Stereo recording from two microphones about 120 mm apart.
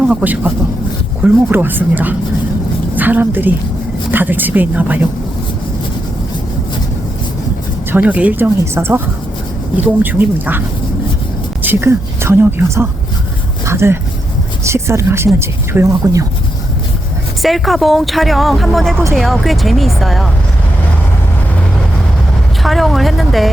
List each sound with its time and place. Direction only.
0.1 s a woman's voice: 15° right (ahead or behind)
7.9 s speech: 15° right (ahead or behind)
11.6 s a woman's voice: 20° right (ahead or behind)
17.4 s speech: centre (ahead or behind)
22.6 s speech: centre (ahead or behind)